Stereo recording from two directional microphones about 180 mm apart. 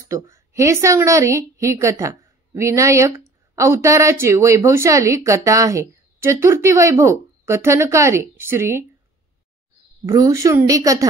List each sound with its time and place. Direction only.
0.1 s a woman's voice: 15° right (ahead or behind)
10.0 s a woman's voice: 20° right (ahead or behind)